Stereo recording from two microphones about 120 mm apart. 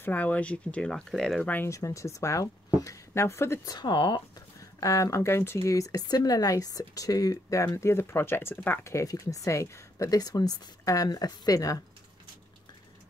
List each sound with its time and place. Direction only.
0.0 s speech: 15° left (ahead or behind)
1.5 s speech: 20° left (ahead or behind)
3.7 s speech: 40° left (ahead or behind)
4.6 s speech: 25° left (ahead or behind)